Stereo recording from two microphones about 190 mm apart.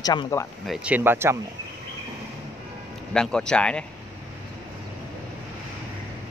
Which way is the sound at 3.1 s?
5° left (ahead or behind).